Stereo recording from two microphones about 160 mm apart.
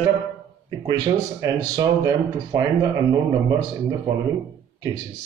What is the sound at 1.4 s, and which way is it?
A man's voice, 20° right (ahead or behind).